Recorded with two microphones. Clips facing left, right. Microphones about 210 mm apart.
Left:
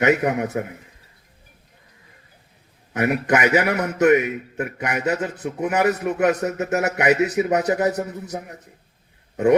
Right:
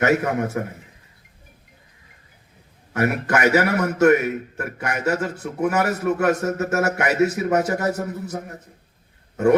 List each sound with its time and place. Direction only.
0.0 s a man's voice: 20° left (ahead or behind)
2.9 s a man's voice: 20° left (ahead or behind)